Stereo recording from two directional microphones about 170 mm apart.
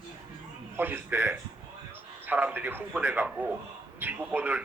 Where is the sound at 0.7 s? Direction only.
10° right (ahead or behind).